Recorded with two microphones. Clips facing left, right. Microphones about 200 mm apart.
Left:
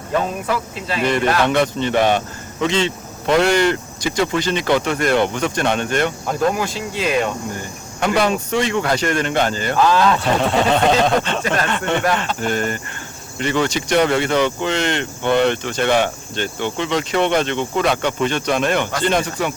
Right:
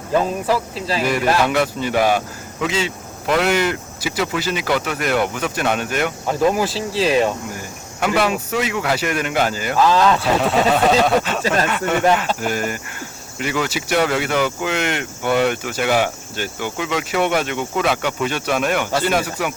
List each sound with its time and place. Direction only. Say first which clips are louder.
0.4 s speech: right 3 dB; 30° right (ahead or behind)
1.0 s speech: left 1 dB; 5° right (ahead or behind)
6.6 s speech: right 3 dB; 30° right (ahead or behind)
8.0 s speech: left 1 dB; 5° right (ahead or behind)